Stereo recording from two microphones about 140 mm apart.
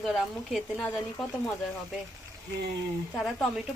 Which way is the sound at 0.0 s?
Centre (ahead or behind).